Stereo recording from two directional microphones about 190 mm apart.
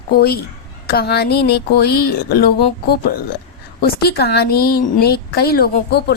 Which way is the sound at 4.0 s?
55° left (ahead or behind).